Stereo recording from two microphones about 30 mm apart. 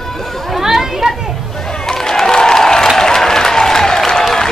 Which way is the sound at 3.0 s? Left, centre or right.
Centre.